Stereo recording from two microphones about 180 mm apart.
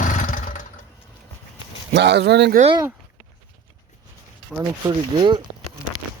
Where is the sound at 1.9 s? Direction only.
70° right (ahead or behind).